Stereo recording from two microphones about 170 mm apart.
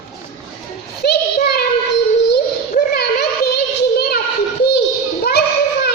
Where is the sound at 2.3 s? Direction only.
70° left (ahead or behind).